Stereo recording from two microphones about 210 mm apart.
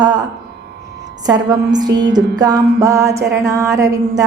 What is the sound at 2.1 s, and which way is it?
A woman's voice, 20° right (ahead or behind).